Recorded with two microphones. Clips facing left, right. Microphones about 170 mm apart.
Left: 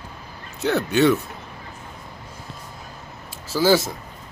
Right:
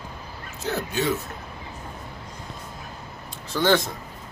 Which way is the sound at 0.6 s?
70° left (ahead or behind).